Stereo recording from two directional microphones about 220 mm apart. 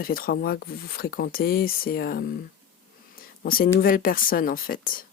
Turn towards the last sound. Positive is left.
turn(degrees=40)  # may be behind; listen again after turning